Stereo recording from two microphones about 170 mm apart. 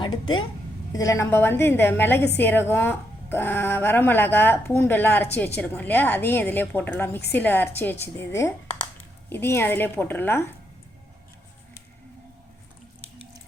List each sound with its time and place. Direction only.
0.0 s speech: 25° left (ahead or behind)